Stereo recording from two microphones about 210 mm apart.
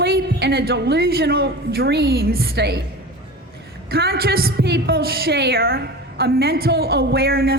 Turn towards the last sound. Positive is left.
turn(degrees=-45)  # may be behind; listen again after turning